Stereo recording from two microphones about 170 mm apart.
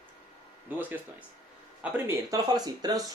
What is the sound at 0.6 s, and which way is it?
Speech, 10° right (ahead or behind).